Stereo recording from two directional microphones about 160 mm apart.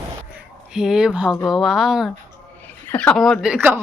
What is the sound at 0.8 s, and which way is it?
Speech, 5° right (ahead or behind).